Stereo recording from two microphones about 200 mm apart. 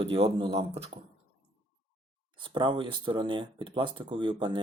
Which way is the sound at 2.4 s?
25° right (ahead or behind).